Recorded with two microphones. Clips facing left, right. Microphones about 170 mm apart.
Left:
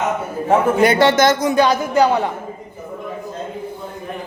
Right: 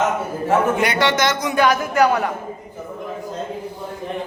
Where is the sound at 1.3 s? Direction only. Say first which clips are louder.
Left 3 dB; 30° left (ahead or behind).